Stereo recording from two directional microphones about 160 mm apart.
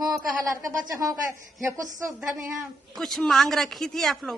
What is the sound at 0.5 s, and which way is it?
Speech, 20° right (ahead or behind).